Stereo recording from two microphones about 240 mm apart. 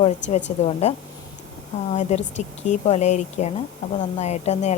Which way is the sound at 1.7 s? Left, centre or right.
Left.